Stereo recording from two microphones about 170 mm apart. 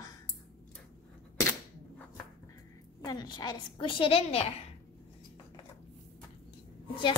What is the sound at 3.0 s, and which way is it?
A woman's voice, 25° left (ahead or behind).